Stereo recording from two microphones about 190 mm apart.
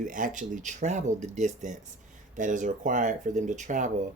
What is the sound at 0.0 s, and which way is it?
Speech, 45° right (ahead or behind).